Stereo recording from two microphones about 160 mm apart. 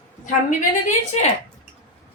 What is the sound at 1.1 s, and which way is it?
Speech, 40° left (ahead or behind).